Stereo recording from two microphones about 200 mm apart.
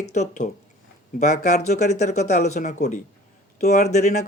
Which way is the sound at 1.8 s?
35° left (ahead or behind).